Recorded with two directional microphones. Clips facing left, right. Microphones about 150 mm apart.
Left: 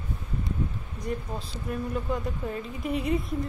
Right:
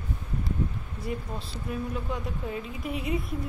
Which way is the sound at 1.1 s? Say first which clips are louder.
Left 2 dB; 5° right (ahead or behind).